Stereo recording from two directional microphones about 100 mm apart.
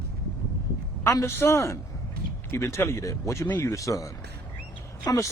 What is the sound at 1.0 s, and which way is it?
A man's voice, 25° left (ahead or behind).